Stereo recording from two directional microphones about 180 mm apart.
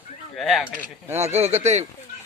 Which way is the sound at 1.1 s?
40° right (ahead or behind).